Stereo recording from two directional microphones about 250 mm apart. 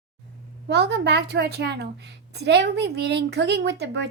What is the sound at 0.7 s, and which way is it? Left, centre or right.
A woman's voice, right.